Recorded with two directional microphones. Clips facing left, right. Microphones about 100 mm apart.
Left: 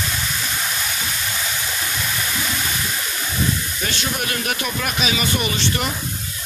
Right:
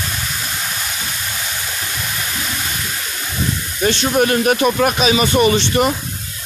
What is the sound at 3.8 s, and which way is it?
Speech, 35° right (ahead or behind).